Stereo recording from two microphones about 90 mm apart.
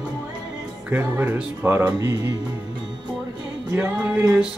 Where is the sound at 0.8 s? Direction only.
20° right (ahead or behind).